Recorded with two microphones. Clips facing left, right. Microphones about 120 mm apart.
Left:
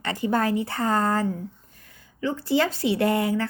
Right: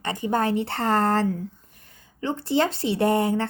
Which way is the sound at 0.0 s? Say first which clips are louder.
Even; 20° right (ahead or behind).